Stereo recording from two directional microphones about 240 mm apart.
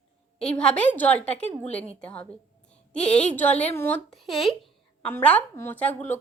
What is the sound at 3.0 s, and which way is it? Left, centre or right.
Speech, left.